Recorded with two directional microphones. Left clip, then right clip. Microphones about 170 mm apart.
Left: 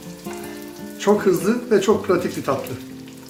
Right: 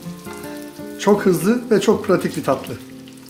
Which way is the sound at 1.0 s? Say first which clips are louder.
Right 1 dB; 50° right (ahead or behind).